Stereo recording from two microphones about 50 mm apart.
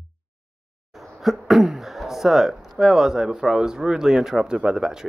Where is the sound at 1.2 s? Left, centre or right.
Centre.